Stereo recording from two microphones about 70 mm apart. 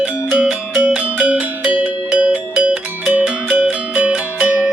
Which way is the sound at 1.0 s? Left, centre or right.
Centre.